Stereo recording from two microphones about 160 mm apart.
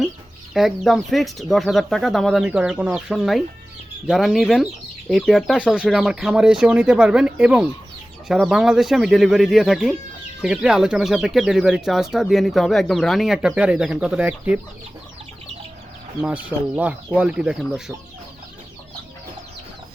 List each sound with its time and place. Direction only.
0.5 s speech: centre (ahead or behind)
16.2 s speech: 10° right (ahead or behind)